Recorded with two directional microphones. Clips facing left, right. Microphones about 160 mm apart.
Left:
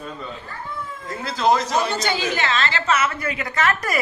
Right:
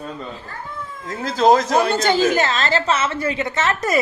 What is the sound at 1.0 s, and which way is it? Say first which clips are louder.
A woman's voice: right 5 dB; 45° right (ahead or behind).